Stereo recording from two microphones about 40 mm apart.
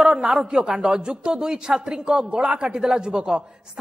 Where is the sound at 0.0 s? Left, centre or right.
Centre.